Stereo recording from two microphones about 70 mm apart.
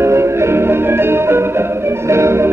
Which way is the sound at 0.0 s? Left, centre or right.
Right.